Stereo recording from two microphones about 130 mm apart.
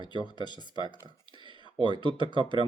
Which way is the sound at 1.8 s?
40° right (ahead or behind).